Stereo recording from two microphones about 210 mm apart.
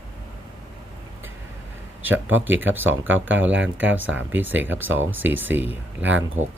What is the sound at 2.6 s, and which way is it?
Speech, 10° right (ahead or behind).